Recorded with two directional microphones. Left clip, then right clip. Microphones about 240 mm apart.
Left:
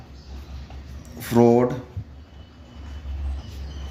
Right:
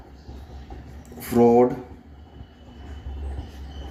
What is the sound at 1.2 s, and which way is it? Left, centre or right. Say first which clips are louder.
Speech: right 1 dB; left.